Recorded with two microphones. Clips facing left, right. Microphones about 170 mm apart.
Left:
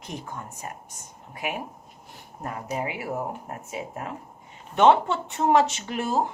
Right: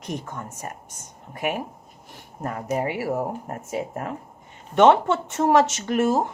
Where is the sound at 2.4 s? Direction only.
50° right (ahead or behind).